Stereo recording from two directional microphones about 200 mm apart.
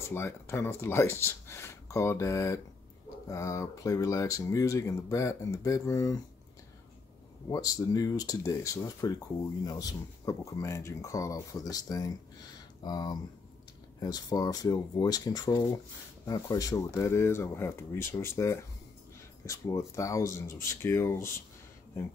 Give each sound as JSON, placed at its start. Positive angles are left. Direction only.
{"t": 0.1, "sound": "speech", "side_deg": 10}
{"t": 7.4, "sound": "speech", "side_deg": 20}